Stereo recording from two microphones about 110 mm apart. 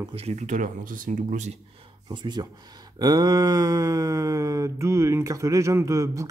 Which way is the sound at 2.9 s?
35° right (ahead or behind).